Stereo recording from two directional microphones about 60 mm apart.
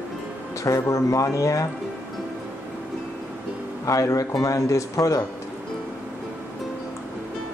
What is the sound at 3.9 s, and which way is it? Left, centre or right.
Speech, left.